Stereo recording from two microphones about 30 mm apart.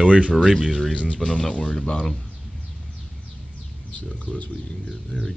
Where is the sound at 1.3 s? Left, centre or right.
Centre.